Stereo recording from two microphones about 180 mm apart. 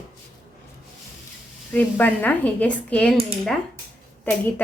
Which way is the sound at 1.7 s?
10° left (ahead or behind).